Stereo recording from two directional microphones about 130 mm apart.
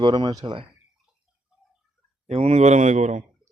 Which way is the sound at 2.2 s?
55° right (ahead or behind).